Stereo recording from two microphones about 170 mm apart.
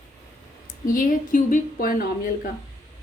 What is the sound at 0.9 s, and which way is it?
Speech, 50° left (ahead or behind).